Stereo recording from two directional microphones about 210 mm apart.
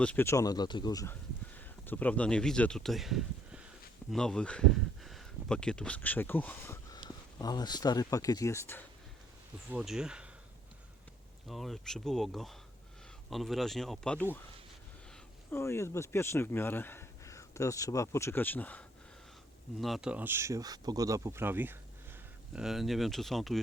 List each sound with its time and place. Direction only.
0.0 s speech: 10° left (ahead or behind)
9.6 s speech: 5° right (ahead or behind)
11.4 s speech: centre (ahead or behind)
15.5 s speech: 15° left (ahead or behind)